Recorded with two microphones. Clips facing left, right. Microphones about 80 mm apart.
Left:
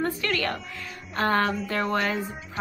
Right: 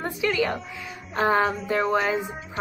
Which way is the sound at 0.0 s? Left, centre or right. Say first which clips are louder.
Right 2 dB; centre.